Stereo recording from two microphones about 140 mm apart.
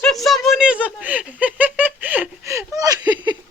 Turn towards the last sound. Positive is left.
turn(degrees=-30)  # may be behind; listen again after turning